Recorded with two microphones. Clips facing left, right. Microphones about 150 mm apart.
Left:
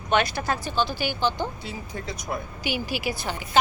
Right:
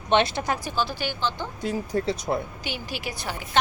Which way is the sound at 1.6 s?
35° right (ahead or behind).